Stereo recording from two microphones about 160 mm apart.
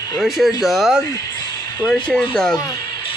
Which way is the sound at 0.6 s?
Centre (ahead or behind).